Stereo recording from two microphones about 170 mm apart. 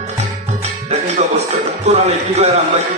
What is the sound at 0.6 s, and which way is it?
Music, 40° right (ahead or behind).